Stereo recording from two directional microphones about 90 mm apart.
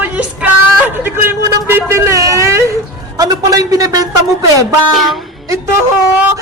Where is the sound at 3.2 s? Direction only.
45° right (ahead or behind).